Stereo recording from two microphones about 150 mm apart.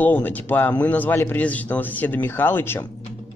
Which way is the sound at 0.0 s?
10° left (ahead or behind).